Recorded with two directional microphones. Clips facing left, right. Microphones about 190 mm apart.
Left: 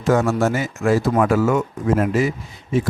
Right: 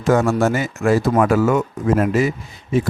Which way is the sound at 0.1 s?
60° right (ahead or behind).